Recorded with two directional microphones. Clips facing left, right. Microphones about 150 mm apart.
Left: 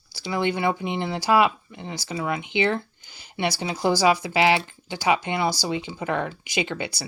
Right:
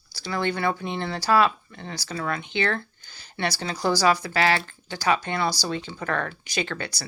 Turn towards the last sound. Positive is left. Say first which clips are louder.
# left 2 dB
turn(degrees=15)  # may be behind; listen again after turning